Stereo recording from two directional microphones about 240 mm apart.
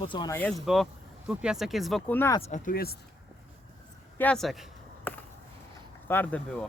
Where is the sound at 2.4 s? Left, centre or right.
Left.